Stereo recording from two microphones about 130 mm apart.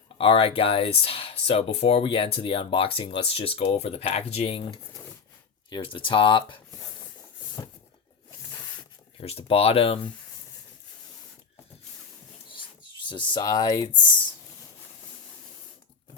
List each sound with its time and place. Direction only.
0.2 s speech: 45° left (ahead or behind)
7.6 s a sound: 25° left (ahead or behind)
9.2 s speech: 50° left (ahead or behind)
13.1 s speech: 35° left (ahead or behind)